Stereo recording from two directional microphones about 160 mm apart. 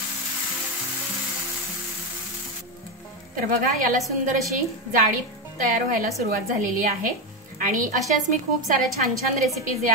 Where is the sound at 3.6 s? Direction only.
55° right (ahead or behind).